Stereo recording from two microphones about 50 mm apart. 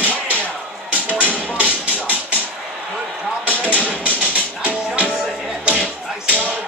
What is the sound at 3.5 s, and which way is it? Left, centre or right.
Music, left.